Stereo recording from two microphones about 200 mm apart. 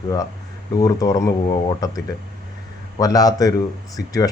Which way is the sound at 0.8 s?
15° left (ahead or behind).